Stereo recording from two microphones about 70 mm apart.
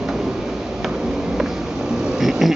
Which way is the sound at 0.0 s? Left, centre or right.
Centre.